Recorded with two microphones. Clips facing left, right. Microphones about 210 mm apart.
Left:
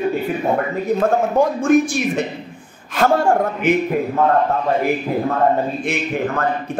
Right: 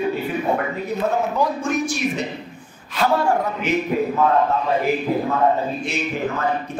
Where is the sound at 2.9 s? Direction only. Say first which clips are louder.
Left 4 dB; 50° left (ahead or behind).